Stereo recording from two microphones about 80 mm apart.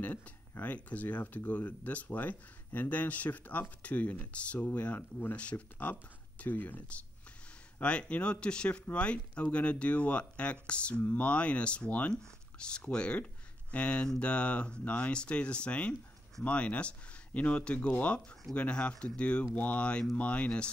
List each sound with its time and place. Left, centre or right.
0.0 s speech: left